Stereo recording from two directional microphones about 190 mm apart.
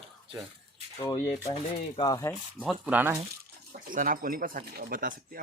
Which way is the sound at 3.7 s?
45° right (ahead or behind).